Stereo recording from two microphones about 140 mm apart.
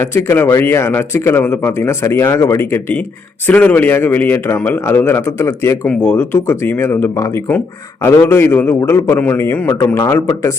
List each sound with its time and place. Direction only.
0.0 s speech: 15° left (ahead or behind)